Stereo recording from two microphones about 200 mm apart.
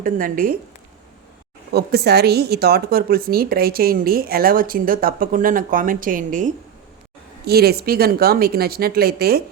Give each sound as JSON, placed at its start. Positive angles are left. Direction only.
{"t": 0.0, "sound": "a woman's voice", "side_deg": -45}
{"t": 1.7, "sound": "a woman's voice", "side_deg": -55}
{"t": 7.4, "sound": "a woman's voice", "side_deg": -50}